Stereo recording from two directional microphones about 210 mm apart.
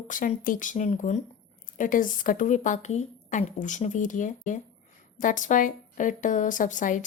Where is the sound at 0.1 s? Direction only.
40° left (ahead or behind).